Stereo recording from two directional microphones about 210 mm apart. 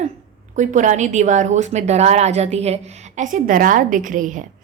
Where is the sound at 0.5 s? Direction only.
35° right (ahead or behind).